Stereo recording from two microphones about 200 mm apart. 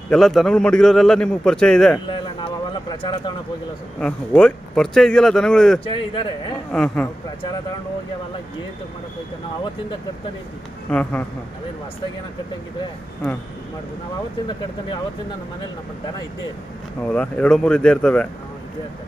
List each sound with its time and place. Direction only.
0.1 s a man's voice: centre (ahead or behind)
2.0 s a sound: 25° left (ahead or behind)
4.0 s a man's voice: 5° left (ahead or behind)
5.9 s speech: 25° left (ahead or behind)
6.7 s a man's voice: 5° left (ahead or behind)
10.9 s speech: 5° left (ahead or behind)
17.1 s a man's voice: 5° left (ahead or behind)